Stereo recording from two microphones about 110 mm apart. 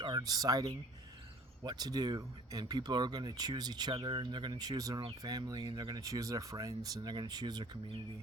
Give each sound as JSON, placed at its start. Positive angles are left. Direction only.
{"t": 0.0, "sound": "speech", "side_deg": -40}